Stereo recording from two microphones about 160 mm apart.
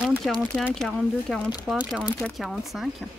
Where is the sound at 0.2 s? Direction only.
Centre (ahead or behind).